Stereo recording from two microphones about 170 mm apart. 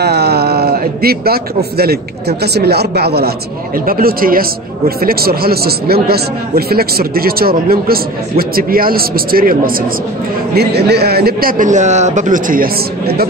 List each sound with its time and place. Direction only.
0.0 s a man's voice: 70° right (ahead or behind)
10.5 s a man's voice: 70° right (ahead or behind)